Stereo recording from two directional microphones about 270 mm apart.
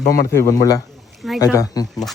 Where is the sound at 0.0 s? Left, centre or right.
Left.